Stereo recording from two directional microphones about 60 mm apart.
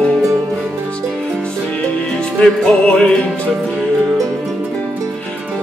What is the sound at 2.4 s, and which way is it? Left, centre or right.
Music, centre.